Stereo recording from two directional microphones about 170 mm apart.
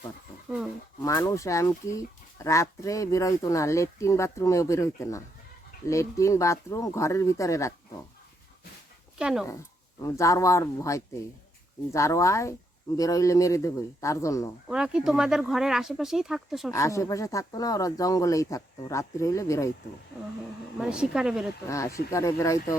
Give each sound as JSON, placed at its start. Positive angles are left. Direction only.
{"t": 0.5, "sound": "speech", "side_deg": -10}
{"t": 1.0, "sound": "speech", "side_deg": 20}
{"t": 9.1, "sound": "speech", "side_deg": -5}
{"t": 10.0, "sound": "speech", "side_deg": 20}
{"t": 14.7, "sound": "speech", "side_deg": -5}
{"t": 16.7, "sound": "speech", "side_deg": 20}
{"t": 20.7, "sound": "speech", "side_deg": -5}
{"t": 21.7, "sound": "speech", "side_deg": 20}